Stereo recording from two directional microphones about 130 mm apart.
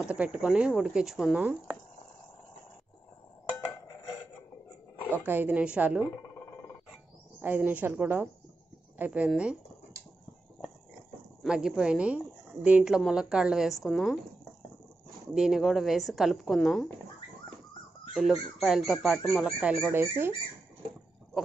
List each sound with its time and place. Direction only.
0.0 s speech: 10° right (ahead or behind)
5.2 s speech: 15° right (ahead or behind)
7.4 s speech: 15° right (ahead or behind)
11.4 s speech: 5° right (ahead or behind)
15.3 s speech: 5° right (ahead or behind)
18.1 s speech: centre (ahead or behind)
19.9 s speech: 15° right (ahead or behind)